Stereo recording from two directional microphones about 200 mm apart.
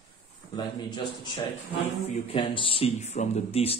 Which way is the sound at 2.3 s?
30° left (ahead or behind).